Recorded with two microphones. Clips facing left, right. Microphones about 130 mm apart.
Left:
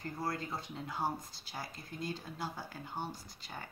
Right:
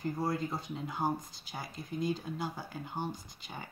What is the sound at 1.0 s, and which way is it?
Speech, 20° right (ahead or behind).